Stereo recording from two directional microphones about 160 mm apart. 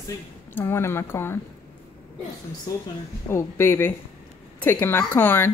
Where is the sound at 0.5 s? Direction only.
15° left (ahead or behind).